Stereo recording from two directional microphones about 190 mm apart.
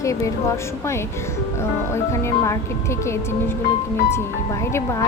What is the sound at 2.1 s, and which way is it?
Speech, 15° left (ahead or behind).